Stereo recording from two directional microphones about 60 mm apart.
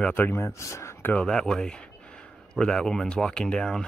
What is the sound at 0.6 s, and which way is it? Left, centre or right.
Speech, left.